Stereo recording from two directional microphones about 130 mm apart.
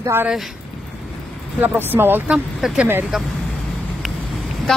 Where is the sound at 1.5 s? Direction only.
15° right (ahead or behind).